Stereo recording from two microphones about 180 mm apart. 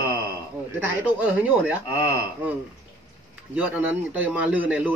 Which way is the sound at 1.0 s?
10° right (ahead or behind).